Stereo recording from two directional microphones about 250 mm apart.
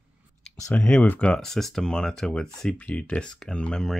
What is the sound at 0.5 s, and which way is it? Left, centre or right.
Speech, centre.